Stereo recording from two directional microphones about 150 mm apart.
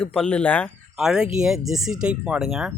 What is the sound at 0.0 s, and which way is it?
Speech, 5° left (ahead or behind).